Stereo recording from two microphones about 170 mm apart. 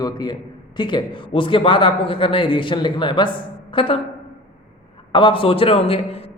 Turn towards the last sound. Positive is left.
turn(degrees=35)  # may be behind; listen again after turning